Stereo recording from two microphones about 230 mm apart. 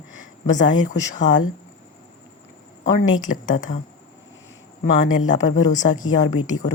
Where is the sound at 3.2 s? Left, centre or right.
Left.